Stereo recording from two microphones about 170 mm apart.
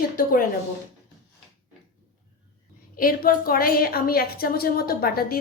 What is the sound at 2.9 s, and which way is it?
A woman's voice, 60° left (ahead or behind).